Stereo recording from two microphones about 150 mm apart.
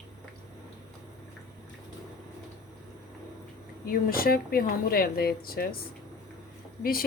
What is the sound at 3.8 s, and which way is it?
Speech, 75° left (ahead or behind).